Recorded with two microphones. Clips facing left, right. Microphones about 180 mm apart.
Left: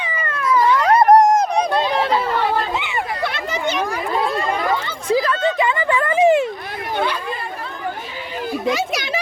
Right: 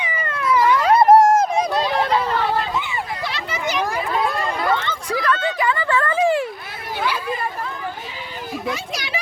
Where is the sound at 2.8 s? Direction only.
70° left (ahead or behind); by 3.5 s 55° left (ahead or behind).